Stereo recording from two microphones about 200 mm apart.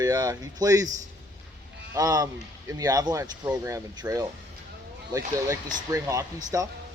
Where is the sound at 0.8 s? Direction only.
40° right (ahead or behind).